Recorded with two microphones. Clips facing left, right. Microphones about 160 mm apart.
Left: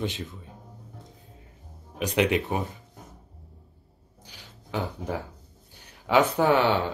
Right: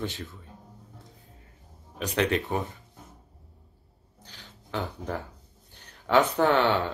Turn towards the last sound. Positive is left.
turn(degrees=10)  # may be behind; listen again after turning